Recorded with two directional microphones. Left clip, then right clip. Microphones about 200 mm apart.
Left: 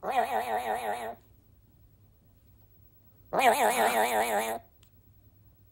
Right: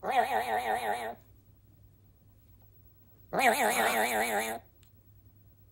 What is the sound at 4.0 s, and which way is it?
Speech, 25° left (ahead or behind).